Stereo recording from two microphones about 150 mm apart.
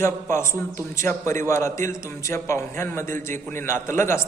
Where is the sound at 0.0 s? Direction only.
15° left (ahead or behind).